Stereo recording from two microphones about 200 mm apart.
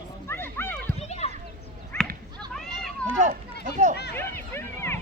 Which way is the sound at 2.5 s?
Centre (ahead or behind).